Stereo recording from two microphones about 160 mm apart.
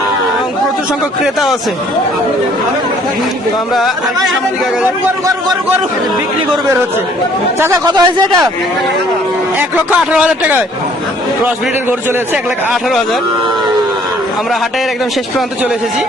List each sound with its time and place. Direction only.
1.2 s speech: centre (ahead or behind)
3.8 s speech: centre (ahead or behind)
7.6 s speech: 20° right (ahead or behind)
10.1 s a man's voice: 5° right (ahead or behind)